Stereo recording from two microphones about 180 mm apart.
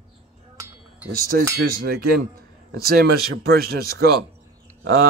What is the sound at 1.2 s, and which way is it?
Speech, 55° right (ahead or behind).